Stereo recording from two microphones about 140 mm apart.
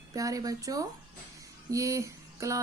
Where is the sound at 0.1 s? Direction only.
25° right (ahead or behind).